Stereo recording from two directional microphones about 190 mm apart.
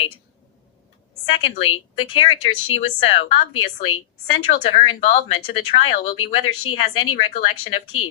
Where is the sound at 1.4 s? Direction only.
90° left.